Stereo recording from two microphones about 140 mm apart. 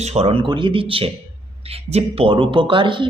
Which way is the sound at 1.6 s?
45° right (ahead or behind).